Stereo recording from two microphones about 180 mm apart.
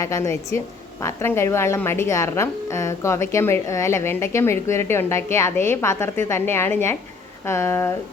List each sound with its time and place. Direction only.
0.0 s a woman's voice: 15° left (ahead or behind)